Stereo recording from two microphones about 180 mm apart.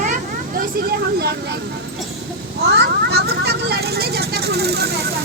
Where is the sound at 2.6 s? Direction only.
65° right (ahead or behind).